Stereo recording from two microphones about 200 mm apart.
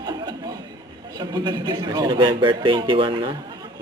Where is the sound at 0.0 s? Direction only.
20° right (ahead or behind).